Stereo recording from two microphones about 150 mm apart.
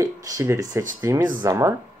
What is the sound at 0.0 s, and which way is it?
Speech, 20° right (ahead or behind).